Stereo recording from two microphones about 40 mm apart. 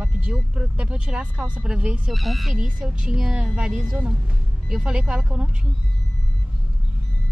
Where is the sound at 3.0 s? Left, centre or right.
Right.